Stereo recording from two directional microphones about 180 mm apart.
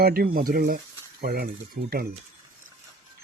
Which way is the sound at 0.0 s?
55° right (ahead or behind).